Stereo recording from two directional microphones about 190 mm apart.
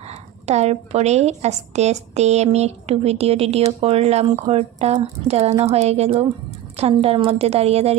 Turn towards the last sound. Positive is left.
turn(degrees=-35)  # may be behind; listen again after turning